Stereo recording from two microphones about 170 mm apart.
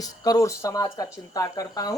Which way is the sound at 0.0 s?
20° left (ahead or behind).